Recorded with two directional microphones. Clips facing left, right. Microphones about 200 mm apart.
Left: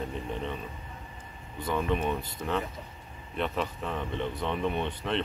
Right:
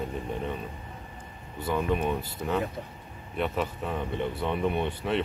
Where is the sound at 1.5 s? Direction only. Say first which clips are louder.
Right 2 dB; 5° right (ahead or behind).